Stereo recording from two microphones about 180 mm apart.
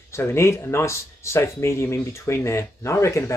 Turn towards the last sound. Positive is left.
turn(degrees=15)  # may be behind; listen again after turning